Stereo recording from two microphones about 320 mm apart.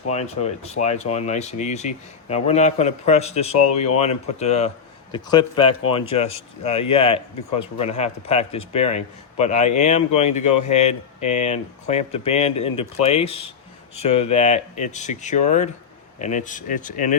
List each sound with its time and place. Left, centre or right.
0.1 s speech: centre